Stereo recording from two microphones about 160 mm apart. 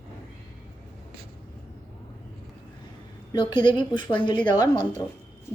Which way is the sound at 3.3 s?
30° left (ahead or behind).